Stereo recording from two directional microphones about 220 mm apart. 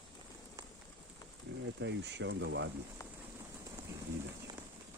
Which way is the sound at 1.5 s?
50° right (ahead or behind).